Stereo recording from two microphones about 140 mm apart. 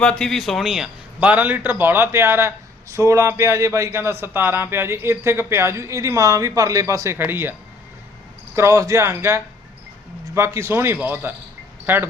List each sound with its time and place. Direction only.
0.0 s a man's voice: 5° left (ahead or behind); by 7.5 s 15° right (ahead or behind)
8.5 s a man's voice: 20° right (ahead or behind)